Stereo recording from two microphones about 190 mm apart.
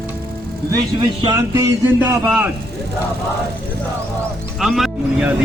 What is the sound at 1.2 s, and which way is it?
Music, 15° right (ahead or behind).